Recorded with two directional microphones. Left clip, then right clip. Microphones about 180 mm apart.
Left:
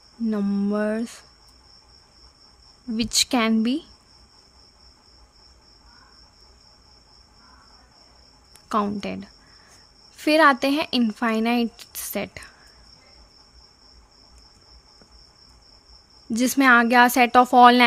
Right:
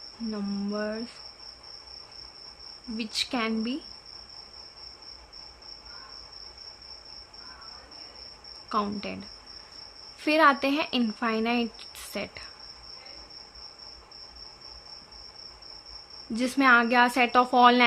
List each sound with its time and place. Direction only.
0.3 s cricket: 45° left (ahead or behind)
3.0 s cricket: 50° left (ahead or behind)
8.7 s cricket: 45° left (ahead or behind)
10.2 s speech: 40° left (ahead or behind)
16.3 s speech: 40° left (ahead or behind)